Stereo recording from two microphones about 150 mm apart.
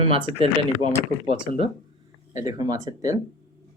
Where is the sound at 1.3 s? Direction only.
35° right (ahead or behind).